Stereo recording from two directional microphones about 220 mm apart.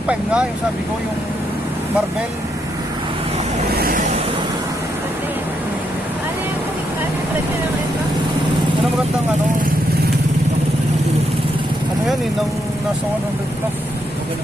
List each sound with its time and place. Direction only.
0.1 s speech: 5° right (ahead or behind)
3.8 s waves: 40° right (ahead or behind)